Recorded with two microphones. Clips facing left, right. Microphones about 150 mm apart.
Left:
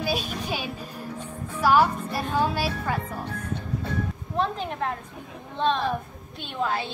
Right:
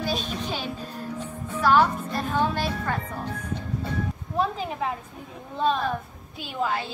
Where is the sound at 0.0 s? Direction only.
10° left (ahead or behind).